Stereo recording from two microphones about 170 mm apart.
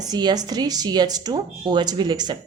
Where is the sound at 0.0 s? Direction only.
25° right (ahead or behind).